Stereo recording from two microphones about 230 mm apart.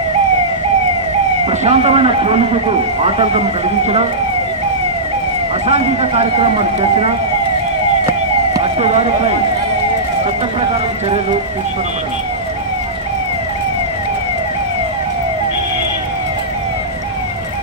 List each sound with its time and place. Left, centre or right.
1.4 s speech: right
5.7 s speech: right
8.5 s police car: right